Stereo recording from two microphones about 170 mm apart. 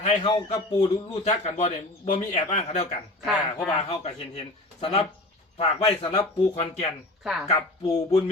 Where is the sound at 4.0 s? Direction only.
40° left (ahead or behind).